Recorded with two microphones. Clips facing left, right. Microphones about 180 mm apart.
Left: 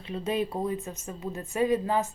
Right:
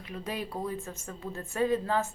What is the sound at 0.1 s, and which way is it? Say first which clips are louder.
Speech: left 7 dB; 25° left (ahead or behind).